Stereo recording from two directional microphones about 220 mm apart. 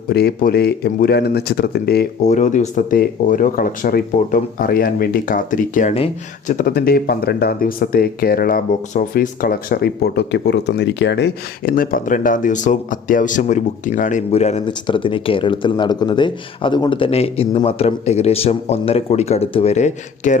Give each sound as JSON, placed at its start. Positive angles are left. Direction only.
{"t": 0.1, "sound": "speech", "side_deg": 45}
{"t": 2.2, "sound": "speech", "side_deg": 35}